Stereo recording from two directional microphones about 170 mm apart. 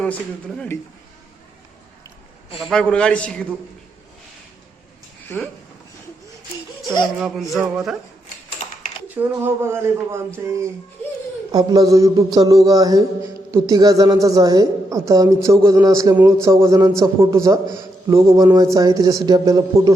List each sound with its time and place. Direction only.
0.0 s speech: 5° left (ahead or behind)
2.6 s a man's voice: centre (ahead or behind)
6.8 s speech: 25° left (ahead or behind)
7.2 s a man's voice: centre (ahead or behind)
8.6 s typing: 45° left (ahead or behind)
9.0 s a man's voice: 10° right (ahead or behind)